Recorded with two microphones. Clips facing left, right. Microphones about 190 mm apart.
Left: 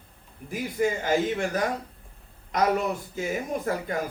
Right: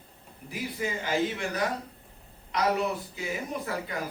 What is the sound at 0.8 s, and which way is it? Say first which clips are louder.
Speech: left 5 dB; 45° left (ahead or behind).